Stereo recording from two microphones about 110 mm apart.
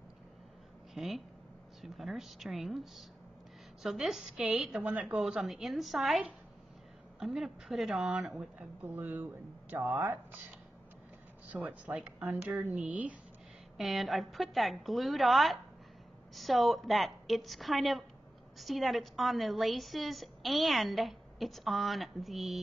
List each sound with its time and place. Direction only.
0.9 s a woman's voice: centre (ahead or behind)
8.8 s speech: 15° right (ahead or behind)
11.6 s speech: 10° right (ahead or behind)
13.7 s a woman's voice: centre (ahead or behind)